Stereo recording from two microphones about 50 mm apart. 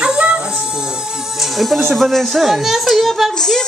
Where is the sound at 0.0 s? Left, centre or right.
Right.